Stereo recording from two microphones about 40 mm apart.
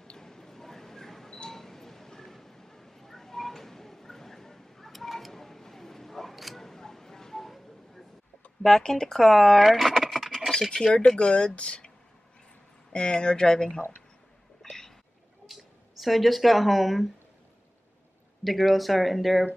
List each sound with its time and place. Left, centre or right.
0.2 s camera: centre
1.5 s a sound: centre
8.6 s speech: centre
10.7 s speech: centre
12.9 s speech: left
14.6 s a sound: centre
15.4 s speech: centre
18.4 s speech: centre